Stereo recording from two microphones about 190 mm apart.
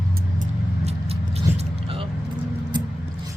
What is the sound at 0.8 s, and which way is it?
Vehicle, 30° right (ahead or behind).